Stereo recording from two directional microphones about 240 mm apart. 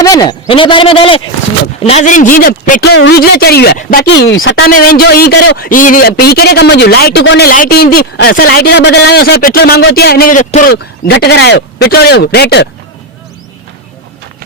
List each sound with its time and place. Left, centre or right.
0.0 s a man's voice: centre; by 12.6 s left